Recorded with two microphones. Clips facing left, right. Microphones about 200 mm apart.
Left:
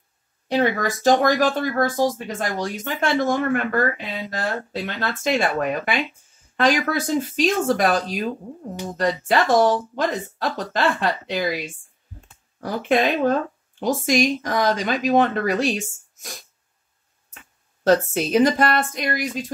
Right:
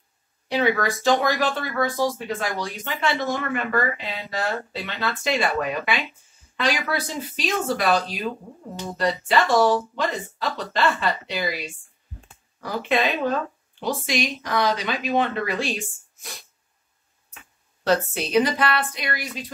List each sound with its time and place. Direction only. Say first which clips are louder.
1.0 s speech: left 5 dB; 45° left (ahead or behind)
17.8 s speech: left 4 dB; 45° left (ahead or behind)